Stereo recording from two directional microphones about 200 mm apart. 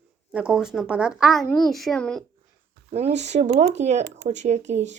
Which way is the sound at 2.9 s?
30° right (ahead or behind).